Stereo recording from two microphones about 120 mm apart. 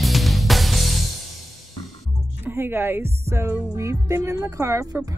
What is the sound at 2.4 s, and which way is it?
Speech, 20° right (ahead or behind).